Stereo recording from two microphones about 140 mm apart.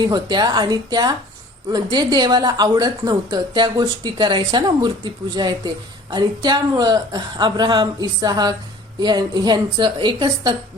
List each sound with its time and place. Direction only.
0.1 s a woman's voice: 30° right (ahead or behind)